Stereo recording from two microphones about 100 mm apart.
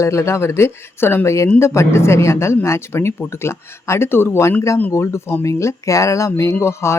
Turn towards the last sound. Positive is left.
turn(degrees=25)  # may be behind; listen again after turning